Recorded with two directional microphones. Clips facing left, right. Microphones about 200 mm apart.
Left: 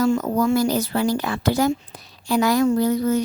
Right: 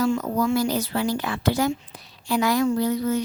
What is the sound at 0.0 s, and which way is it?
Speech, 45° left (ahead or behind).